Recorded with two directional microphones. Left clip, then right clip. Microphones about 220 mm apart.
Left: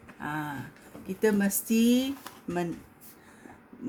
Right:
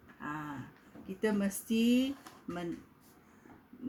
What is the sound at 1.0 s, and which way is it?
Speech, 40° left (ahead or behind).